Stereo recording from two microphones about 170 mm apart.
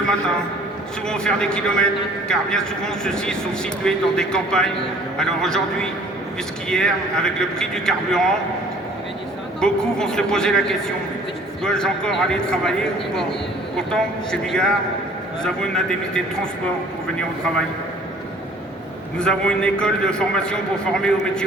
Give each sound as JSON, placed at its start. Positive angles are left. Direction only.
{"t": 1.0, "sound": "a man's voice", "side_deg": 5}
{"t": 9.6, "sound": "a man's voice", "side_deg": 5}
{"t": 13.7, "sound": "a man's voice", "side_deg": 5}
{"t": 19.2, "sound": "a man's voice", "side_deg": 5}